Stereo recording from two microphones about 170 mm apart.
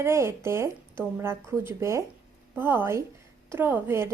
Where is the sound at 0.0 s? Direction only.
15° right (ahead or behind).